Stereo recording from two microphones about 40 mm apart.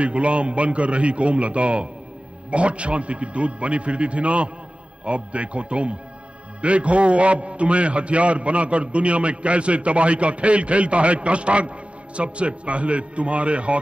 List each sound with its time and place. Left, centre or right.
0.0 s a man's voice: right